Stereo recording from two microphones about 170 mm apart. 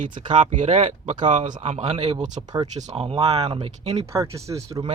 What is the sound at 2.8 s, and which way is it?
Speech, 40° right (ahead or behind).